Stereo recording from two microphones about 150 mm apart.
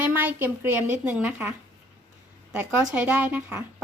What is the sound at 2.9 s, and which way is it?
Speech, 10° right (ahead or behind).